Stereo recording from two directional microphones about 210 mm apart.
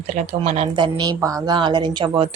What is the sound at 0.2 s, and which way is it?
A woman's voice, 30° right (ahead or behind).